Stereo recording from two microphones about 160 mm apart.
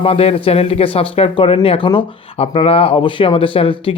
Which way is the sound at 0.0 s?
35° left (ahead or behind).